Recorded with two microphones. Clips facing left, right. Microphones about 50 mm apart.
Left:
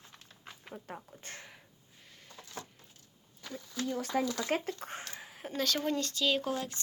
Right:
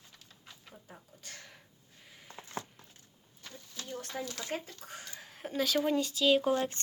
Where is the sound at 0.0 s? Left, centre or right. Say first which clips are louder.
Left 4 dB; left.